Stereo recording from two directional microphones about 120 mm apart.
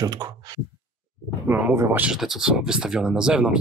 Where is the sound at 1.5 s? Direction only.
15° right (ahead or behind).